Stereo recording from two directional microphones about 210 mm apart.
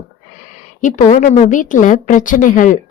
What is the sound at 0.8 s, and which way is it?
A woman's voice, 35° left (ahead or behind).